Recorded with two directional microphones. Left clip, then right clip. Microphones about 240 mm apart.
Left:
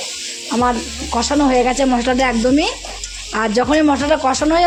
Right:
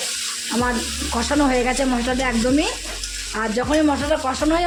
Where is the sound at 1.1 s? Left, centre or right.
Centre.